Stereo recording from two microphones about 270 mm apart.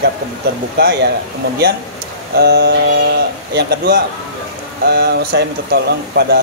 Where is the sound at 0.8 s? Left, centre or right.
Right.